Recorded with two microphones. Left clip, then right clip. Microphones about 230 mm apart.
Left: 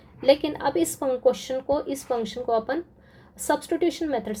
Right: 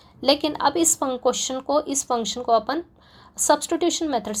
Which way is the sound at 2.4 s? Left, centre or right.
Right.